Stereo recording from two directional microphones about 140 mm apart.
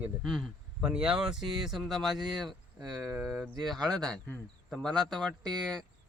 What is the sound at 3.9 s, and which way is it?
Speech, 5° left (ahead or behind).